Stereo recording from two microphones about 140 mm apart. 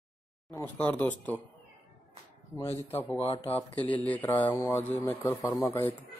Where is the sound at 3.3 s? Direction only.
45° left (ahead or behind).